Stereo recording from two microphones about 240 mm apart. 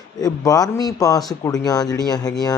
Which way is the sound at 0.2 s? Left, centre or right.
Centre.